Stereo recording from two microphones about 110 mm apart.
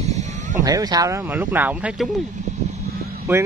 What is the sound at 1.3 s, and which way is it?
Speech, 15° right (ahead or behind).